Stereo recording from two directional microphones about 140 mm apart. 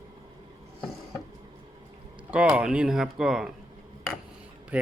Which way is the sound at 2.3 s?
10° right (ahead or behind).